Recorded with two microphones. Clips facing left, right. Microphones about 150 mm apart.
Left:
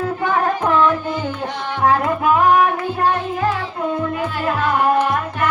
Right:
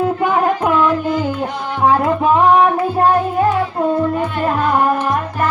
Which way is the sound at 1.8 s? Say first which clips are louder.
Right 3 dB; 25° right (ahead or behind).